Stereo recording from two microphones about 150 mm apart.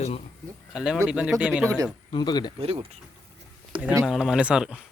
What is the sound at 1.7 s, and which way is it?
Speech, 25° right (ahead or behind).